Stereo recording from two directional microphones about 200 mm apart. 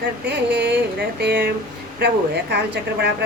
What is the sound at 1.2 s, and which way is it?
Speech, 55° right (ahead or behind).